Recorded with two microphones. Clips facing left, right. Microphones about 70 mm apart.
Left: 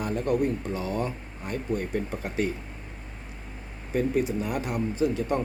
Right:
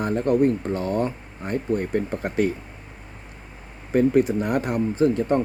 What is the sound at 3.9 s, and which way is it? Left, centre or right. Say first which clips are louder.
Speech: right 7 dB; right.